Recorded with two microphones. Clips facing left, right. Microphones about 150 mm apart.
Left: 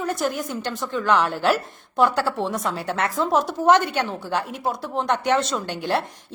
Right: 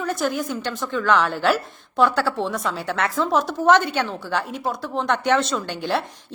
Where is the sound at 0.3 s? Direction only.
Centre (ahead or behind).